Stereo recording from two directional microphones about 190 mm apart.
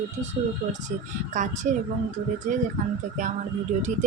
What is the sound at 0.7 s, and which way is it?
Speech, 40° right (ahead or behind).